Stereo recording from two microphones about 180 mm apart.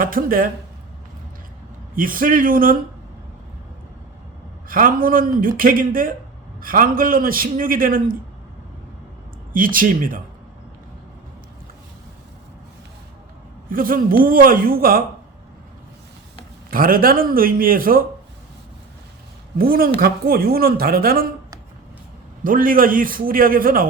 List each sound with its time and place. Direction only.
0.0 s a man's voice: 50° right (ahead or behind)
2.0 s a man's voice: 50° right (ahead or behind)
4.7 s a man's voice: 50° right (ahead or behind)
9.5 s a man's voice: 50° right (ahead or behind)
13.7 s a man's voice: 50° right (ahead or behind)
16.7 s a man's voice: 55° right (ahead or behind)
19.5 s a man's voice: 55° right (ahead or behind)
22.4 s a man's voice: 50° right (ahead or behind)